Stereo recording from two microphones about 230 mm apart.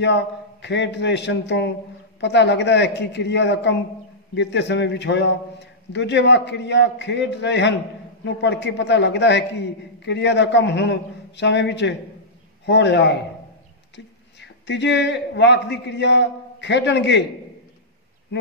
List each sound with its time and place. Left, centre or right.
0.0 s a man's voice: left